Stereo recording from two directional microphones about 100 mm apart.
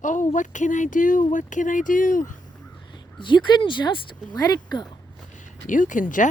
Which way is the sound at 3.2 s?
50° left (ahead or behind).